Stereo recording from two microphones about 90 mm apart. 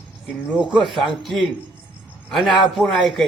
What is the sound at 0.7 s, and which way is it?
A man's voice, centre (ahead or behind).